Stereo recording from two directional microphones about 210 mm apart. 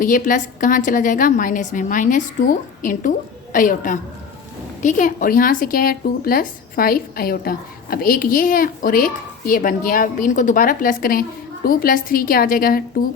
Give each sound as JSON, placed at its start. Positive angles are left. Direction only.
{"t": 0.0, "sound": "speech", "side_deg": 40}